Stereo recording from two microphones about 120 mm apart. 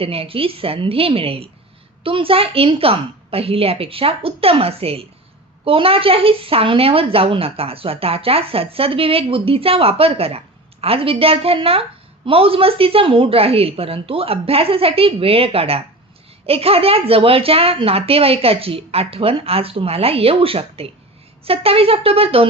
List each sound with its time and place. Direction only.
0.0 s a woman's voice: 50° right (ahead or behind)